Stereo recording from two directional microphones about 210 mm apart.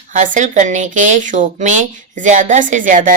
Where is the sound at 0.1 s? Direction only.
35° right (ahead or behind).